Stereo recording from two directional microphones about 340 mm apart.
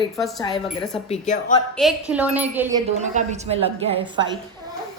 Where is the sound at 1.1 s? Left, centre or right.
Left.